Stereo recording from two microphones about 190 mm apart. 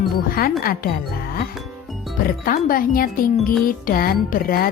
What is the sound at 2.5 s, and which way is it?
Speech, 50° left (ahead or behind).